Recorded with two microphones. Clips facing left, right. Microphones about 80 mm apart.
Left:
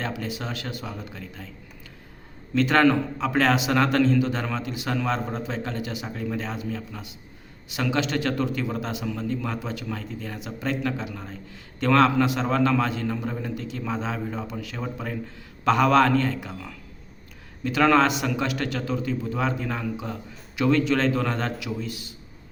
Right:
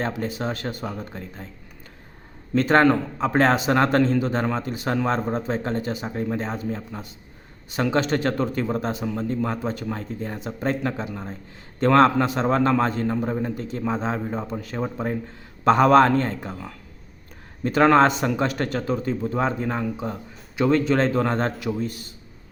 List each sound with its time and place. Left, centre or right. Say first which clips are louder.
0.0 s a man's voice: right 4 dB; right
2.6 s a man's voice: right 2 dB; right